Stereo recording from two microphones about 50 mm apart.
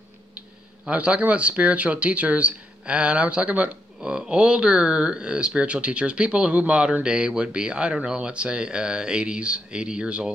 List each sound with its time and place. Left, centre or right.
0.8 s speech: right